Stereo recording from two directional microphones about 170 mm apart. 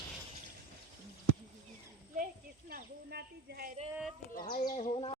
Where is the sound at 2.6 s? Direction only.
60° right (ahead or behind).